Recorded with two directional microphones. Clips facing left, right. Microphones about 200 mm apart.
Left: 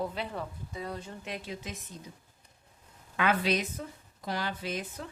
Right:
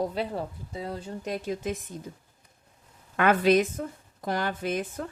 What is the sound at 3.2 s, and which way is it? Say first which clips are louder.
A woman's voice: right 7 dB; 50° right (ahead or behind).